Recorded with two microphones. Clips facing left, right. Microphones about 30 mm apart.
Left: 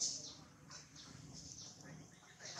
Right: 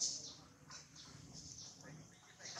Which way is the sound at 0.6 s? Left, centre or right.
Centre.